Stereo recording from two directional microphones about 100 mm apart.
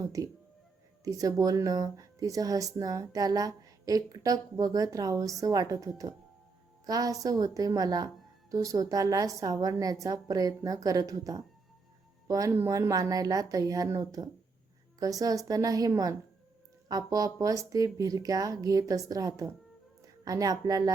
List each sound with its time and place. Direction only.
0.0 s a woman's voice: 35° right (ahead or behind)